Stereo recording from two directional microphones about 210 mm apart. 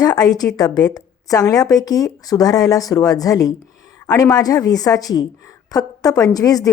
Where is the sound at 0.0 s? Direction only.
15° left (ahead or behind).